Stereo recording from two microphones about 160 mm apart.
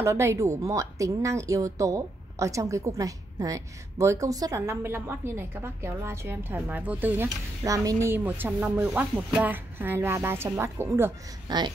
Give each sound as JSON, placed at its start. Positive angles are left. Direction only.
{"t": 0.0, "sound": "a woman's voice", "side_deg": -15}